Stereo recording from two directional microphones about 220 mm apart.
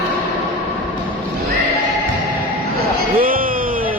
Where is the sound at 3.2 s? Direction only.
40° right (ahead or behind).